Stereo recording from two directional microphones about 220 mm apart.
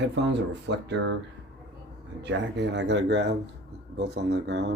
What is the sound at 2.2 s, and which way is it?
Speech, 55° right (ahead or behind).